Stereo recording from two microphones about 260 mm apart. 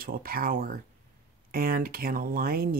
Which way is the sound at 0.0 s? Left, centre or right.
Right.